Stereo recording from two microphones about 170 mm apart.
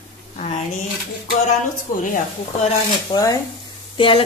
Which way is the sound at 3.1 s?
25° left (ahead or behind).